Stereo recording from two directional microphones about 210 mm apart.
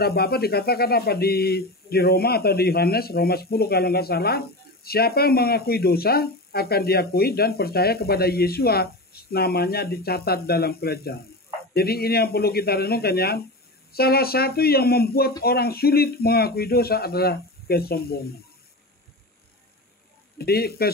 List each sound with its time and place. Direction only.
0.0 s speech: 50° left (ahead or behind)
20.3 s speech: 50° left (ahead or behind)